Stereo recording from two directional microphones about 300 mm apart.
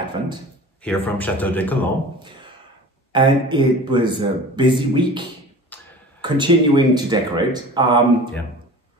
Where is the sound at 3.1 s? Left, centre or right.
Centre.